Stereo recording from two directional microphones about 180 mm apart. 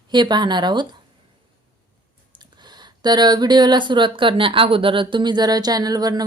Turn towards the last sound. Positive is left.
turn(degrees=-20)  # may be behind; listen again after turning